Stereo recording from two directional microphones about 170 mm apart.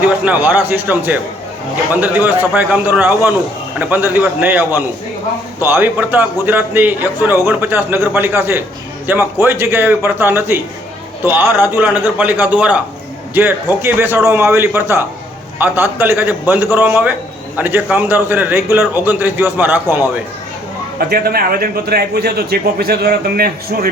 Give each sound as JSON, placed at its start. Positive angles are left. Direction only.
{"t": 0.3, "sound": "a man's voice", "side_deg": -10}
{"t": 21.1, "sound": "a man's voice", "side_deg": -65}